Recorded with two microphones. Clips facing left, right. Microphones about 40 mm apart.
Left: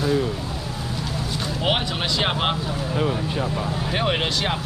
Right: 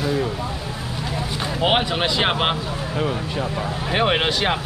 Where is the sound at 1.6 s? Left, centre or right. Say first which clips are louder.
Right 5 dB; centre.